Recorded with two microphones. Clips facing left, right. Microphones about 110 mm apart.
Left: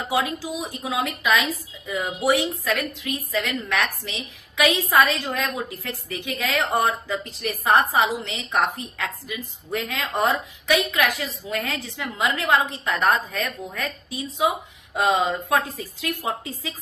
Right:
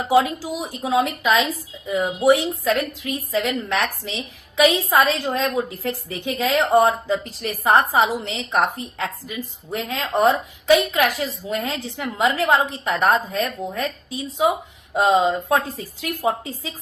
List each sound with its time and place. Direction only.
0.1 s a woman's voice: 25° right (ahead or behind)